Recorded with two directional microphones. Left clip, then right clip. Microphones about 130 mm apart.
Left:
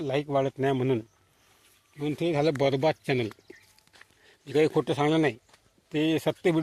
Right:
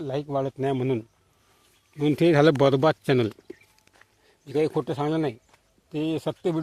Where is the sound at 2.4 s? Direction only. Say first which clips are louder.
Right 5 dB; 90° right.